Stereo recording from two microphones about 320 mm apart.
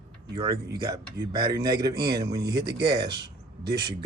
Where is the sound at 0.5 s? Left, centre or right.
Right.